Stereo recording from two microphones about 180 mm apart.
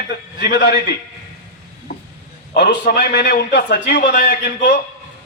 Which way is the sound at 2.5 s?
65° left (ahead or behind).